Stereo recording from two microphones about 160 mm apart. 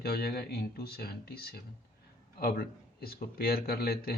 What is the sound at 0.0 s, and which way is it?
A man's voice, 80° left.